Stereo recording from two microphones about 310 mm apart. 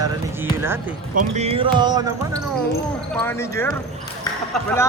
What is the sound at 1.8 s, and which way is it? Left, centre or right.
Basketball bounce, centre.